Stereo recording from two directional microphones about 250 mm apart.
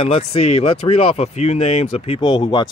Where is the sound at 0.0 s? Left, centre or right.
Left.